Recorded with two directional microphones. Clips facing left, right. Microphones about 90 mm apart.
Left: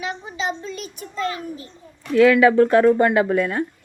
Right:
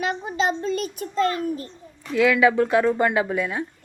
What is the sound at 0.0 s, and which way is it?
A child's voice, 50° right (ahead or behind).